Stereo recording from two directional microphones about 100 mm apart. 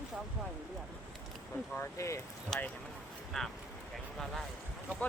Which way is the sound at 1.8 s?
30° left (ahead or behind).